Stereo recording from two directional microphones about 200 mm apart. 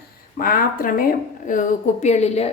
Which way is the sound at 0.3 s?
45° left (ahead or behind).